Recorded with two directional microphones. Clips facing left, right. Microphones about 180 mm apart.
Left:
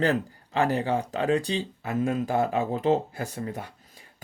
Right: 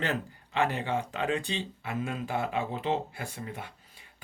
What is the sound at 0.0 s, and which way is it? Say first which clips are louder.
Speech: left 7 dB; 40° left (ahead or behind).